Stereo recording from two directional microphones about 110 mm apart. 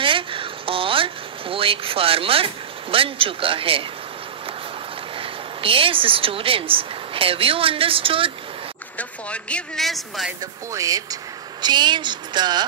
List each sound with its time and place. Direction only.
0.0 s a sound: 55° right (ahead or behind)
2.9 s a man's voice: 55° right (ahead or behind)
5.1 s speech: 55° right (ahead or behind)
8.9 s speech: 10° left (ahead or behind)
10.4 s speech: 30° right (ahead or behind)